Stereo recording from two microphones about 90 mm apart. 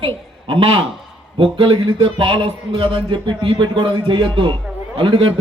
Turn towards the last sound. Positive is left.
turn(degrees=-75)  # may be behind; listen again after turning